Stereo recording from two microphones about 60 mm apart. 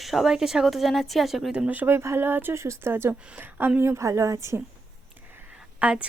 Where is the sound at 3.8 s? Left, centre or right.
Right.